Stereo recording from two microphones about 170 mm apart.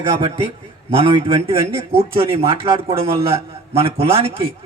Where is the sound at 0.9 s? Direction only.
35° right (ahead or behind).